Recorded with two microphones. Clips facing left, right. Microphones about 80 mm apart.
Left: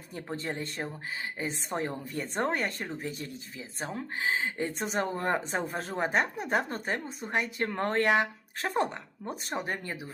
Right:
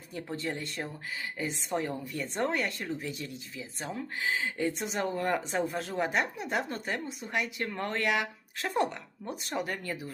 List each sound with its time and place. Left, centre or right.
0.1 s speech: left